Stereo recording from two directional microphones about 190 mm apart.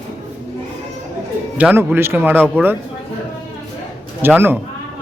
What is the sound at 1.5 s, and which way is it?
Speech, 10° right (ahead or behind).